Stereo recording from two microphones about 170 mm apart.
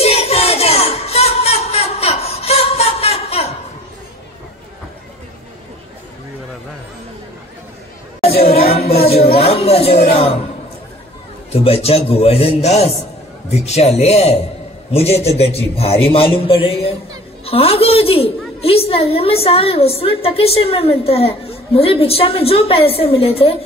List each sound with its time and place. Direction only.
0.0 s a sound: 35° left (ahead or behind)
8.2 s chatter: 35° left (ahead or behind)
8.6 s music: 65° left (ahead or behind)
8.9 s music: 35° left (ahead or behind)
11.5 s a woman's voice: 35° left (ahead or behind)